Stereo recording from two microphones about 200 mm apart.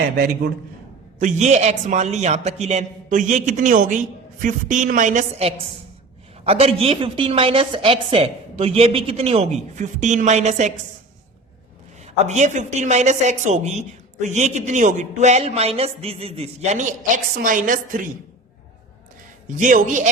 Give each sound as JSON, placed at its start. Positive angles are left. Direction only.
{"t": 1.2, "sound": "a woman's voice", "side_deg": -35}
{"t": 12.0, "sound": "a woman's voice", "side_deg": -35}
{"t": 19.5, "sound": "a woman's voice", "side_deg": -40}